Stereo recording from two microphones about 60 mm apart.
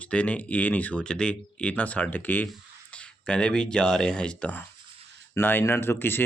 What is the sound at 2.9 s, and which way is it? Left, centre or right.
Speech, centre.